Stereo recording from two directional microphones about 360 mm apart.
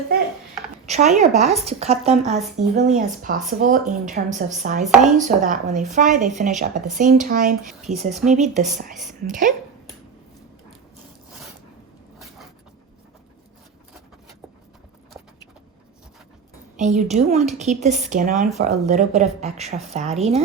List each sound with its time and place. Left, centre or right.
0.9 s speech: centre
7.7 s speech: centre
8.3 s speech: centre
16.7 s speech: centre